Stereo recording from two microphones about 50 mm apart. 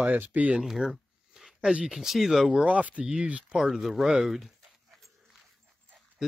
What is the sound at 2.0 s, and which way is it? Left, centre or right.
Speech, centre.